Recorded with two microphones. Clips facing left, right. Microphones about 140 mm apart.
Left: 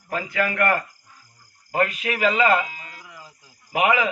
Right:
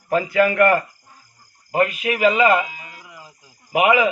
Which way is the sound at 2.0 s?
15° right (ahead or behind).